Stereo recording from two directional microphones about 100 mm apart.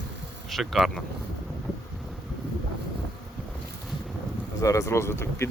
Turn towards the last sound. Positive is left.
turn(degrees=25)  # may be behind; listen again after turning